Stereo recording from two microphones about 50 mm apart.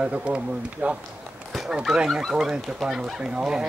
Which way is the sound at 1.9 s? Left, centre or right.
Centre.